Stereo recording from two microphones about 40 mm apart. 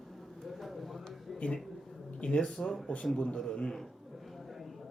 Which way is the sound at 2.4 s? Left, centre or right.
Centre.